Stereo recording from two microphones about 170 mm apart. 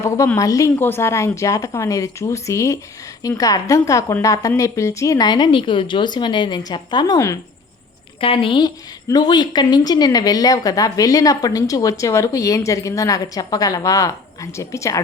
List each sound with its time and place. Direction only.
0.0 s a woman's voice: 15° left (ahead or behind)
8.2 s a woman's voice: 30° left (ahead or behind)